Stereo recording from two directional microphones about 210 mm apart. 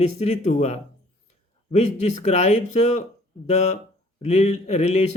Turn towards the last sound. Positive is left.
turn(degrees=30)  # may be behind; listen again after turning